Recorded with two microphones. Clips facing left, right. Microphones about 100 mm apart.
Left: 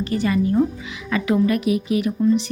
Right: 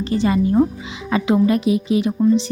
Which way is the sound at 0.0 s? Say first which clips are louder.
Right 2 dB; 30° right (ahead or behind).